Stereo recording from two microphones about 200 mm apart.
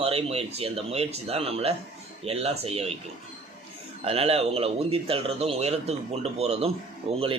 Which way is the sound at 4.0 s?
30° right (ahead or behind).